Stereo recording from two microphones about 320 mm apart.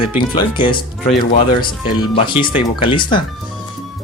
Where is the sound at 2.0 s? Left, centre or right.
Centre.